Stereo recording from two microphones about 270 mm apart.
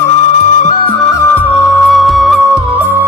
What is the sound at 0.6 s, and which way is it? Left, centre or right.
Music, left.